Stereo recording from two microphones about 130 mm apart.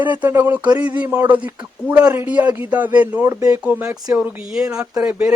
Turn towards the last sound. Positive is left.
turn(degrees=-10)  # may be behind; listen again after turning